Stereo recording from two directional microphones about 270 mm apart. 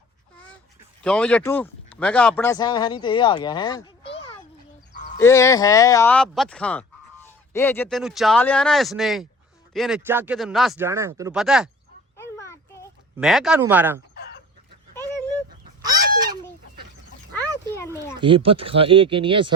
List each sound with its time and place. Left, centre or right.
1.0 s speech: centre
12.1 s a sound: centre
13.1 s speech: centre
14.2 s chicken: left
17.3 s a sound: centre
17.9 s speech: centre